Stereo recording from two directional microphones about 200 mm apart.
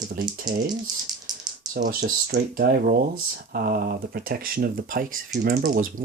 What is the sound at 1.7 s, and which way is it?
Speech, 45° right (ahead or behind).